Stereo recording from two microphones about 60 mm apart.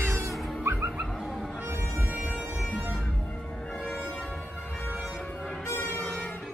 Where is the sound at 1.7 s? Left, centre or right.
Right.